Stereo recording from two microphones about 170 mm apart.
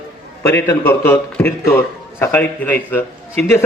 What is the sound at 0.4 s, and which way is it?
A man's voice, 15° left (ahead or behind).